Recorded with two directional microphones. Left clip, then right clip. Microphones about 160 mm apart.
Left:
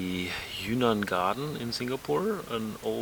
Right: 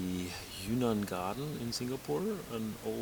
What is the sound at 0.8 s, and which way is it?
Speech, 25° left (ahead or behind).